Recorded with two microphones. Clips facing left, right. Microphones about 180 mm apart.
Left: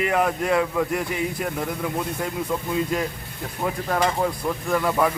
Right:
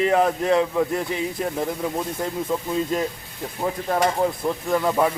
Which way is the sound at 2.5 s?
25° right (ahead or behind).